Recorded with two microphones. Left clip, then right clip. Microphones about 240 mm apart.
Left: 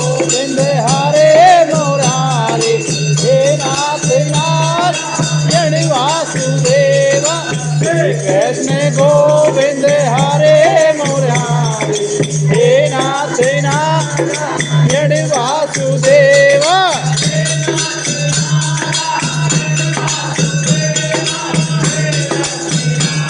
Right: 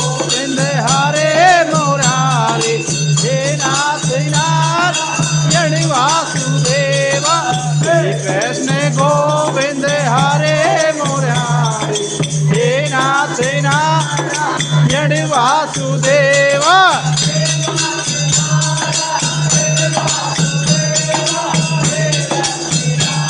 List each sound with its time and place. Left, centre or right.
1.0 s music: centre
3.2 s music: centre
6.7 s music: centre
9.9 s music: centre
12.6 s music: centre